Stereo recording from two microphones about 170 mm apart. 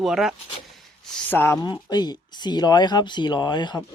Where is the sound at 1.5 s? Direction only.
25° left (ahead or behind).